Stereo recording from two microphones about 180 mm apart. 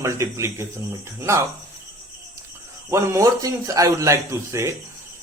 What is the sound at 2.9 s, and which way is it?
A man's voice, 15° right (ahead or behind).